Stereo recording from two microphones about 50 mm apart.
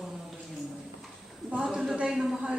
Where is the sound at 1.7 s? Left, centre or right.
Centre.